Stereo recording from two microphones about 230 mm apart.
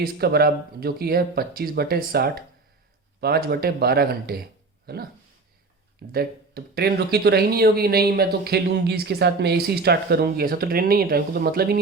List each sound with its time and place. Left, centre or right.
0.0 s speech: right
6.1 s speech: right